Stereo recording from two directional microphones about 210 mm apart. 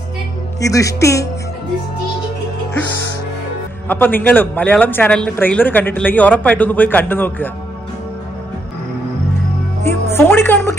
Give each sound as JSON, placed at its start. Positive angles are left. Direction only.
{"t": 0.6, "sound": "speech", "side_deg": 15}
{"t": 3.9, "sound": "speech", "side_deg": 10}
{"t": 10.1, "sound": "speech", "side_deg": 10}